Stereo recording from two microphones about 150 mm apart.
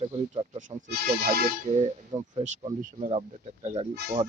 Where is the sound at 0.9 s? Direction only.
90° right.